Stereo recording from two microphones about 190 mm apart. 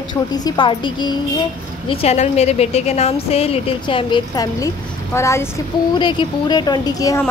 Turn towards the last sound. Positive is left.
turn(degrees=15)  # may be behind; listen again after turning